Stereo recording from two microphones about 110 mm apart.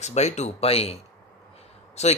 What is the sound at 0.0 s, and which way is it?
Speech, 90° left.